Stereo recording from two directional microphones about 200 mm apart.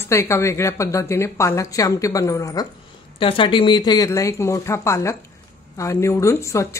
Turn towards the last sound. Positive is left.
turn(degrees=15)  # may be behind; listen again after turning